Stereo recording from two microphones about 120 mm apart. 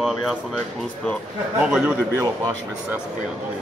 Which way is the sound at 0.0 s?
Centre (ahead or behind).